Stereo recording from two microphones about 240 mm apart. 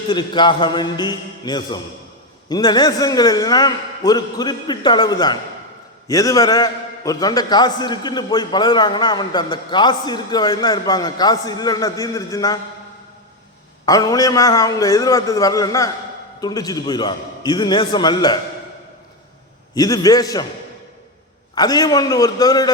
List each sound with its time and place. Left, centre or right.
0.1 s a man's voice: centre
13.8 s a man's voice: centre
19.7 s a man's voice: centre
21.5 s a man's voice: centre